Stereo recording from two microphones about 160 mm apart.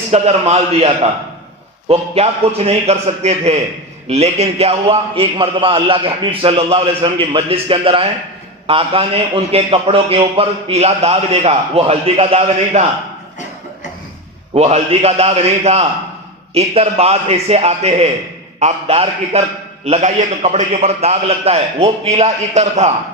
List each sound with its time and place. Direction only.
0.1 s a man's voice: 40° right (ahead or behind)
14.5 s a man's voice: 40° right (ahead or behind)